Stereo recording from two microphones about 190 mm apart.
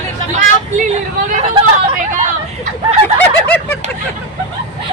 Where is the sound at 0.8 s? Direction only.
40° right (ahead or behind).